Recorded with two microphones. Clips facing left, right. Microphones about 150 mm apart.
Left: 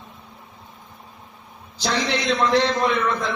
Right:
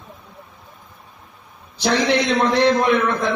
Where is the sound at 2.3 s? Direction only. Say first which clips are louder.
Even; 60° right (ahead or behind).